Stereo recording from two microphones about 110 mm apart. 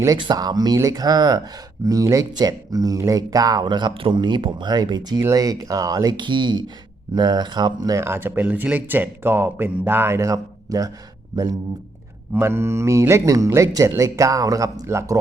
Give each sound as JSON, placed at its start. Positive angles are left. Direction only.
{"t": 0.2, "sound": "speech", "side_deg": -40}
{"t": 12.3, "sound": "speech", "side_deg": -20}